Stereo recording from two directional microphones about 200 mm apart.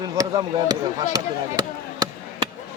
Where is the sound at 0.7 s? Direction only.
20° right (ahead or behind).